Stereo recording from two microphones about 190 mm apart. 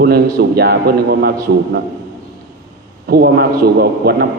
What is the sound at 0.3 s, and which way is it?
Speech, 55° right (ahead or behind).